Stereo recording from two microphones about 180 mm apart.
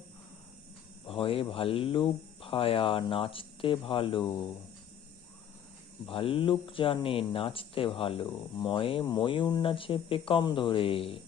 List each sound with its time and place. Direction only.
1.0 s speech: 30° left (ahead or behind)
6.1 s speech: 30° left (ahead or behind)